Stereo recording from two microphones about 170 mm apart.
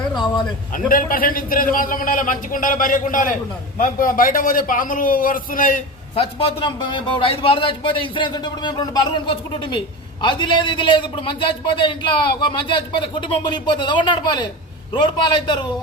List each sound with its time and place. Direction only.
0.7 s a man's voice: 55° left (ahead or behind)
6.1 s a man's voice: 35° left (ahead or behind)